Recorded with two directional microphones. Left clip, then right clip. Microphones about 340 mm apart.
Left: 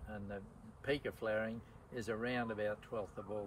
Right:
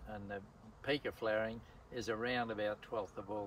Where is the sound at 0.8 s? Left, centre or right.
Centre.